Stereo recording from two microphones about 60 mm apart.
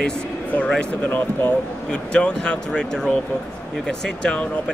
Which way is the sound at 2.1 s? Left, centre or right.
Centre.